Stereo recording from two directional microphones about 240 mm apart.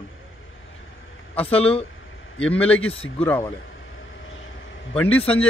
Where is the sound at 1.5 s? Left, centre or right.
Left.